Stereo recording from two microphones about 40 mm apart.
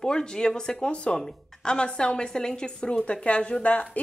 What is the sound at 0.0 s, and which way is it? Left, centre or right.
Speech, centre.